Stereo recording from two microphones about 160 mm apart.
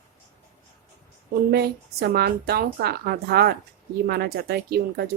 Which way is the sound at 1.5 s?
90° right.